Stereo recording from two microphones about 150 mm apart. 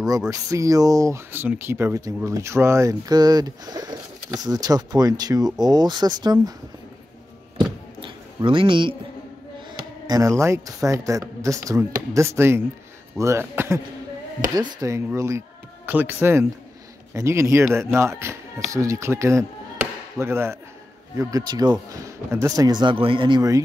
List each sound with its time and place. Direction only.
0.3 s speech: 20° right (ahead or behind)
7.5 s a sound: 30° right (ahead or behind)
10.0 s speech: 25° right (ahead or behind)
14.8 s speech: 20° right (ahead or behind)